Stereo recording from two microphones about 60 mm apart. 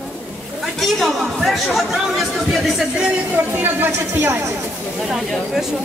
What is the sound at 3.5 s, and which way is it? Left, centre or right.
Speech, right.